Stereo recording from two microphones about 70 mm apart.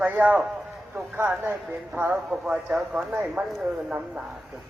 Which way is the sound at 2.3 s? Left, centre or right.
Centre.